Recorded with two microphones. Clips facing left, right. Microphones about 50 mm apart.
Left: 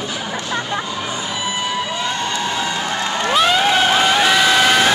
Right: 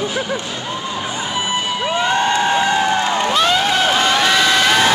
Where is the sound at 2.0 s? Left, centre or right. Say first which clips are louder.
Right 6 dB; right.